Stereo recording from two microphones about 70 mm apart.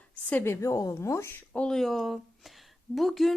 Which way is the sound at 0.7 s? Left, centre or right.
Left.